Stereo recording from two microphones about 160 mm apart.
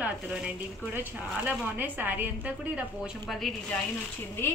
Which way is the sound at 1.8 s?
10° right (ahead or behind).